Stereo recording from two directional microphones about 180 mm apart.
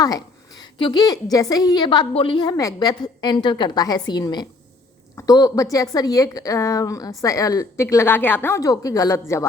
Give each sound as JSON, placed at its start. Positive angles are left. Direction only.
{"t": 0.0, "sound": "a woman's voice", "side_deg": 20}